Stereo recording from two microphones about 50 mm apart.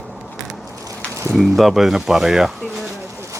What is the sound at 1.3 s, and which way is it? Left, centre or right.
Speech, centre.